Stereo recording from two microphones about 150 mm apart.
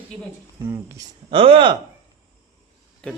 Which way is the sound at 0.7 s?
20° right (ahead or behind).